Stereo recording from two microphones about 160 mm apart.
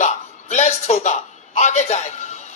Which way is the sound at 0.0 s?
45° left (ahead or behind).